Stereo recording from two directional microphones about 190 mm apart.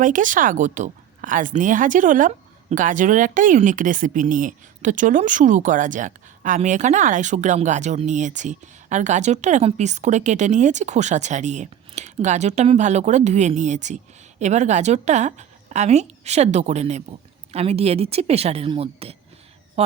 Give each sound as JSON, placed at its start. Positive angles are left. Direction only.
{"t": 0.0, "sound": "a woman's voice", "side_deg": -45}